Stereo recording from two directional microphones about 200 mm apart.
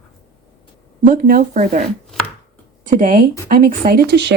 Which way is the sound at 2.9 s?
40° right (ahead or behind).